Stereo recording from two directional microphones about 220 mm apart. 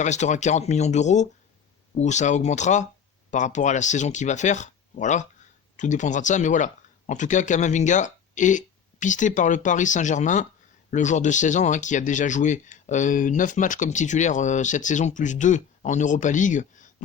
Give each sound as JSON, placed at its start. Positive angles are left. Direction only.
{"t": 0.0, "sound": "speech", "side_deg": 30}